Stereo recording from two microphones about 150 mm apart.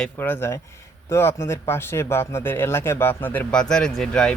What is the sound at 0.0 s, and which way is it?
Speech, 15° left (ahead or behind).